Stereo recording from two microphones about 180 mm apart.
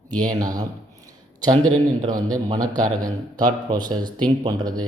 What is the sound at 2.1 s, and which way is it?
A man's voice, 20° right (ahead or behind).